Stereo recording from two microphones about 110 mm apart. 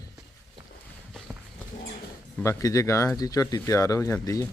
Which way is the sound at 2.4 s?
30° left (ahead or behind).